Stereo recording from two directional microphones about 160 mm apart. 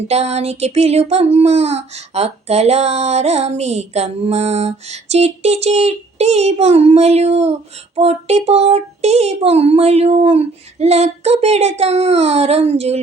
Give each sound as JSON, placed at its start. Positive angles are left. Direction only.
{"t": 0.1, "sound": "child singing", "side_deg": -40}
{"t": 7.9, "sound": "speech", "side_deg": -40}